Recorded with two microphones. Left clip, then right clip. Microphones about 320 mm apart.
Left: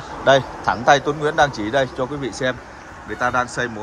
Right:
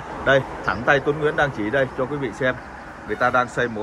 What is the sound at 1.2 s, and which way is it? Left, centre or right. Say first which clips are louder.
Speech: left 3 dB; left.